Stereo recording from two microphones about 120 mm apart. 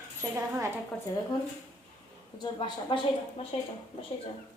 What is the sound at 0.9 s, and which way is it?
Speech, 5° left (ahead or behind).